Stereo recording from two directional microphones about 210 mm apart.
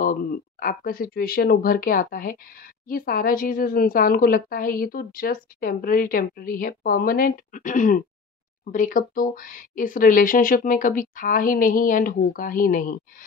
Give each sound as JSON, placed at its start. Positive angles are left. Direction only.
{"t": 0.0, "sound": "speech", "side_deg": 40}